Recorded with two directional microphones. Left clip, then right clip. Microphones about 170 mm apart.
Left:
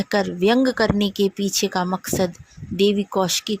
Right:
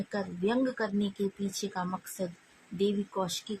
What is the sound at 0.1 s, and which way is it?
Speech, 55° left (ahead or behind).